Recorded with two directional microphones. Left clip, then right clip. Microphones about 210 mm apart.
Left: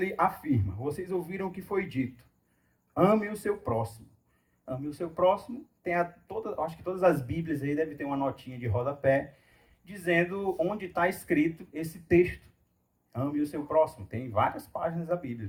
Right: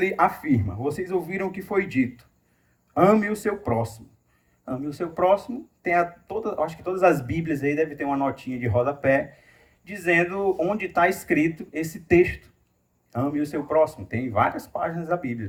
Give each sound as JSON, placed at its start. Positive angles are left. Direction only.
{"t": 0.0, "sound": "speech", "side_deg": -30}